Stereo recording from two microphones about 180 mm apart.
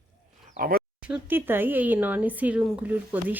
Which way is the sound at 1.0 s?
10° right (ahead or behind).